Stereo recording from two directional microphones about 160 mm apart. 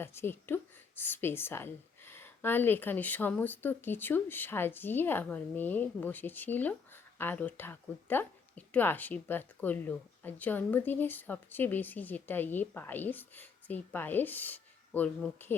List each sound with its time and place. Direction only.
0.0 s a woman's voice: 15° left (ahead or behind)